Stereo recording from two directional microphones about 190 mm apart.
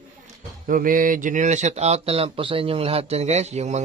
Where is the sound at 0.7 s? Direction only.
45° right (ahead or behind).